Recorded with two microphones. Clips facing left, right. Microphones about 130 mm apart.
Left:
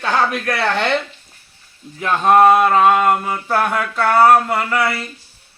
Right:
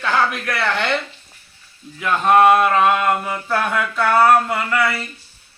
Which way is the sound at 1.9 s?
35° left (ahead or behind).